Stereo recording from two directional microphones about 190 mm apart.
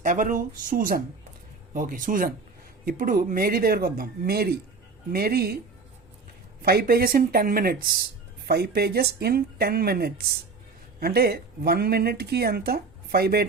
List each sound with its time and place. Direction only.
0.0 s speech: 45° right (ahead or behind)
6.6 s speech: 55° right (ahead or behind)